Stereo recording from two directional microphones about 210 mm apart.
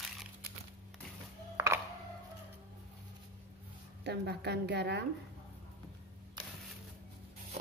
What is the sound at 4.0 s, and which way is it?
A woman's voice, 55° right (ahead or behind).